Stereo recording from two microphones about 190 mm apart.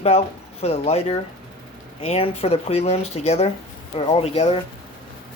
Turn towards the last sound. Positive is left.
turn(degrees=30)  # may be behind; listen again after turning